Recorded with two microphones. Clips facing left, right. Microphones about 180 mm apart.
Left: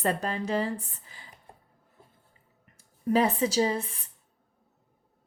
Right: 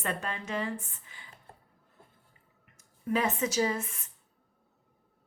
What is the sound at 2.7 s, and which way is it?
Speech, 35° left (ahead or behind).